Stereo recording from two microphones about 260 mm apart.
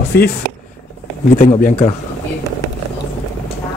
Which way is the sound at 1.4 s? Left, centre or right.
Left.